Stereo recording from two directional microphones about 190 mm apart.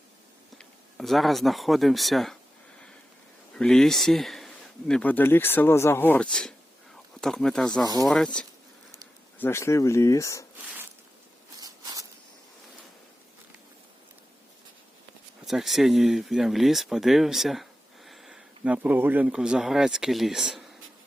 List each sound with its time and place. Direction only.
0.6 s speech: centre (ahead or behind)
3.5 s speech: 5° left (ahead or behind)
11.6 s a sound: 20° right (ahead or behind)
15.4 s speech: centre (ahead or behind)